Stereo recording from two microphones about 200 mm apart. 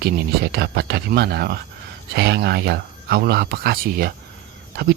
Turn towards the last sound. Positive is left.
turn(degrees=-50)  # may be behind; listen again after turning